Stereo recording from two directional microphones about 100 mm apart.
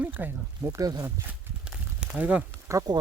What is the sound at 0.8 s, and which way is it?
Speech, 40° right (ahead or behind).